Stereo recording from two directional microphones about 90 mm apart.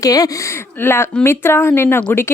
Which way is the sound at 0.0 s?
45° left (ahead or behind).